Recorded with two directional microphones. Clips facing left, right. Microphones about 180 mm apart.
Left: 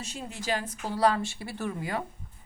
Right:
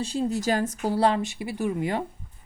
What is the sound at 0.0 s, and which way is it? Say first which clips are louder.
Speech: right 11 dB; 35° right (ahead or behind).